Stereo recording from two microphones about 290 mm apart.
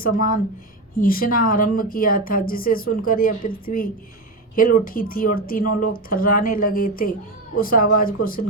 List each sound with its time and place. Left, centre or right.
0.0 s speech: left